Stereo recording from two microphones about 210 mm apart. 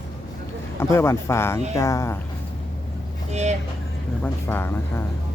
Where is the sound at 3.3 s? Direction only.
30° right (ahead or behind).